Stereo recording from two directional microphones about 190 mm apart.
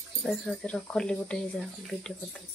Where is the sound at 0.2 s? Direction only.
Centre (ahead or behind).